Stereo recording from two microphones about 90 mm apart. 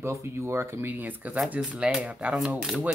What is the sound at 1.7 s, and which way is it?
Speech, 10° right (ahead or behind).